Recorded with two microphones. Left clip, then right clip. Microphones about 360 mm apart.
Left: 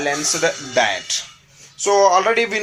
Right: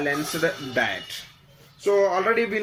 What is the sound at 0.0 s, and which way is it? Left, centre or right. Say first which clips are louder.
Speech: left 5 dB; left.